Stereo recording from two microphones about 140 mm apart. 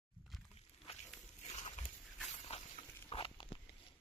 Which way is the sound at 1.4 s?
55° left (ahead or behind).